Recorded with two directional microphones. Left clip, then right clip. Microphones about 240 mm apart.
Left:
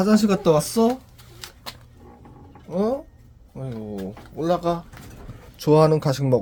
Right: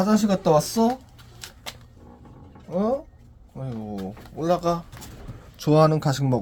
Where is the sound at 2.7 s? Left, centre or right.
Centre.